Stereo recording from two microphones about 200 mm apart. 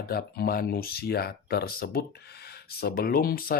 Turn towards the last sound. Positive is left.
turn(degrees=45)  # may be behind; listen again after turning